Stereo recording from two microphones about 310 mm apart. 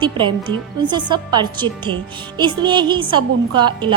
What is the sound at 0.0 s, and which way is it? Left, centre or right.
A woman's voice, centre.